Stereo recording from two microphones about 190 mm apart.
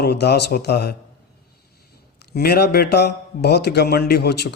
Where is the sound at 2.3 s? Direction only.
60° left (ahead or behind).